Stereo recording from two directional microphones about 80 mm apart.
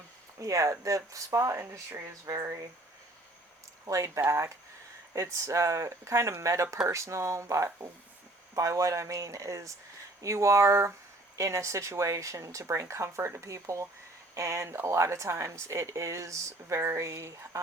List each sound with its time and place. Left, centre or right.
0.3 s speech: right
3.8 s speech: right